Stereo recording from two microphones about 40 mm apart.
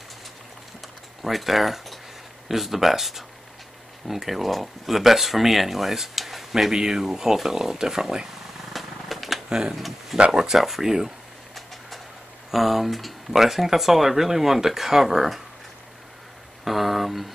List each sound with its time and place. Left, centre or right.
1.2 s speech: centre
8.7 s typewriter: centre
9.5 s speech: centre
9.8 s a sound: centre
10.1 s speech: right
10.4 s speech: centre
12.4 s speech: centre
16.6 s speech: centre